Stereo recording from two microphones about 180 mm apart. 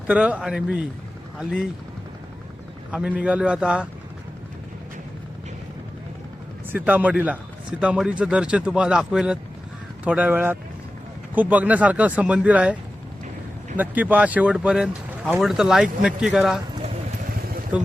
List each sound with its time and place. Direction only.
0.1 s speech: 5° right (ahead or behind)
2.9 s a man's voice: 5° right (ahead or behind)
6.7 s a man's voice: 10° right (ahead or behind)
13.7 s a man's voice: 10° right (ahead or behind)